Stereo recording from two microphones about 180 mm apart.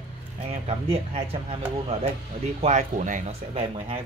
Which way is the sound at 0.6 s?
35° right (ahead or behind).